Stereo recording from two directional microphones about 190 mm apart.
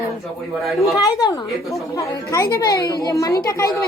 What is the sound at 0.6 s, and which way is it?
Speech, centre (ahead or behind).